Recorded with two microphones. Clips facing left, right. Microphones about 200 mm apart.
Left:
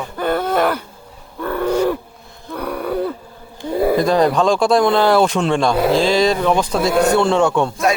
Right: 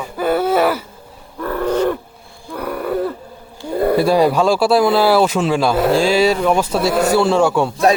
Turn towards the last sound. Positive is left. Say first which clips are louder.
# right 1 dB
turn(degrees=-5)  # may be behind; listen again after turning